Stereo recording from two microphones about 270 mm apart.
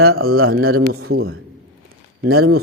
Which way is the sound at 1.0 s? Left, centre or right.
Right.